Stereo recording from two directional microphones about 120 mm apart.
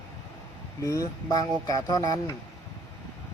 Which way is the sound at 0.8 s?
25° left (ahead or behind).